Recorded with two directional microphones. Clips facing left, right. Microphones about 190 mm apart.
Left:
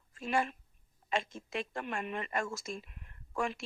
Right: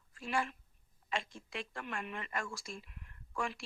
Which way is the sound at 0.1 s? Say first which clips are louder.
Left 4 dB; 20° left (ahead or behind).